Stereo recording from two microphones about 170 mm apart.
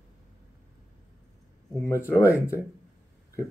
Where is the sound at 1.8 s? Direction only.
15° left (ahead or behind).